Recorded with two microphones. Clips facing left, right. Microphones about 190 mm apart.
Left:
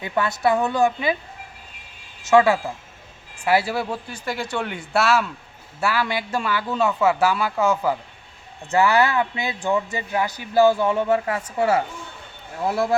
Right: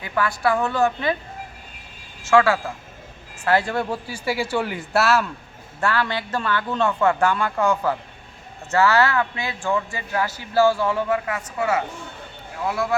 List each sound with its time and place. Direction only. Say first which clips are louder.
0.0 s a man's voice: left 1 dB; 20° left (ahead or behind)
2.2 s a man's voice: left 1 dB; 20° left (ahead or behind); by 5.2 s centre (ahead or behind)
5.8 s a man's voice: even; 10° left (ahead or behind); by 13.0 s 30° left (ahead or behind)